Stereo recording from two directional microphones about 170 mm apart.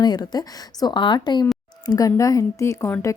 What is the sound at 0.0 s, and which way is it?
Speech, 25° left (ahead or behind).